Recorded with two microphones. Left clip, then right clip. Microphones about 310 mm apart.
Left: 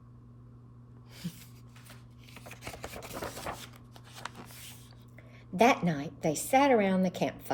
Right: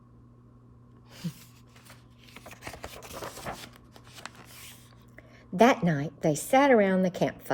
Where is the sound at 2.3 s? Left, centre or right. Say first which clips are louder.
Right 2 dB; centre.